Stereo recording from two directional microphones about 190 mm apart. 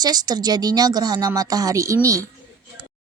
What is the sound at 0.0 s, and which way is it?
A woman's voice, 20° right (ahead or behind).